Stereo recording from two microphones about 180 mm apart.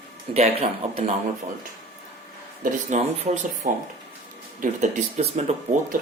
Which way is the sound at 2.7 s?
40° right (ahead or behind).